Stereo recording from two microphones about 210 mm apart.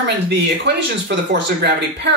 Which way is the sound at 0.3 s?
55° right (ahead or behind).